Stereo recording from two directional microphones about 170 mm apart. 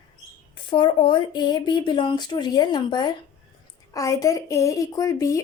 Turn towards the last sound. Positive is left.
turn(degrees=20)  # may be behind; listen again after turning